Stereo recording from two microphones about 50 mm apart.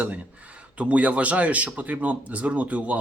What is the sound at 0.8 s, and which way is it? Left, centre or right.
Speech, right.